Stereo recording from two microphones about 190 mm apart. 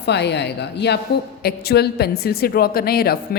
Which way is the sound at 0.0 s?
65° left (ahead or behind).